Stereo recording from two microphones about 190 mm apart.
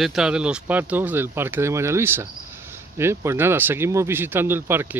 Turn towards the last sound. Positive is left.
turn(degrees=-10)  # may be behind; listen again after turning